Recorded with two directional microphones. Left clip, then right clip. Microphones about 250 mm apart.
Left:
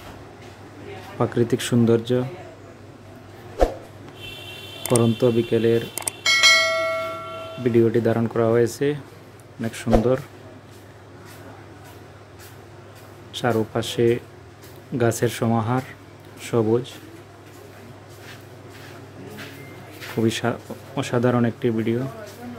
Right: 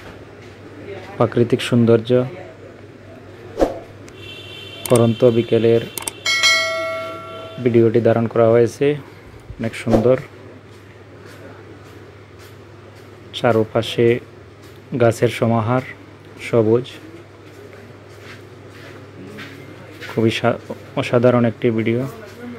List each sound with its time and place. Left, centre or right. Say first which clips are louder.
1.1 s speech: right 5 dB; centre
3.6 s a sound: right 3 dB; centre
4.8 s bell: right 6 dB; centre
7.6 s speech: right 5 dB; centre
13.3 s speech: right 6 dB; centre
20.2 s speech: right 6 dB; centre